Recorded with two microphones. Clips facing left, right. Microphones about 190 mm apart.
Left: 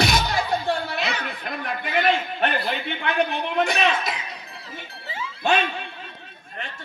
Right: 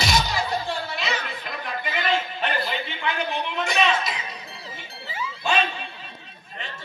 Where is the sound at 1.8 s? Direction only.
60° left (ahead or behind).